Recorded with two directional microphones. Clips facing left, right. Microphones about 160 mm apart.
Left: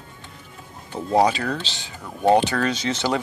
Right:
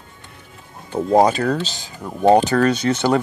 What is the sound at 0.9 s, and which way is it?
Speech, 45° right (ahead or behind).